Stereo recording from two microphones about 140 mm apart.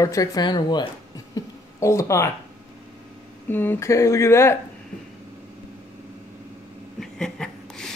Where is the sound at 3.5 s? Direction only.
15° left (ahead or behind).